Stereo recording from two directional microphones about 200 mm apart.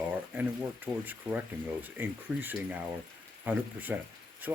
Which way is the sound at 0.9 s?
20° right (ahead or behind).